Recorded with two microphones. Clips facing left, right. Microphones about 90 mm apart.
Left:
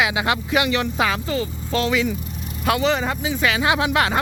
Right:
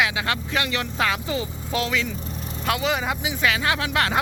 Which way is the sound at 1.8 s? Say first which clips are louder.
Left 7 dB; 5° left (ahead or behind).